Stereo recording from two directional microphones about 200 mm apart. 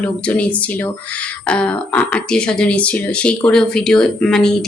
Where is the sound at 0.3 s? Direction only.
5° left (ahead or behind).